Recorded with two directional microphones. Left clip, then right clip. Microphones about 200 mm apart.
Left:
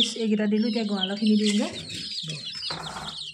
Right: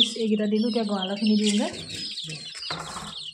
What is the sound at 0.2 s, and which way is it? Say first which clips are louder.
Speech: right 1 dB; 20° left (ahead or behind).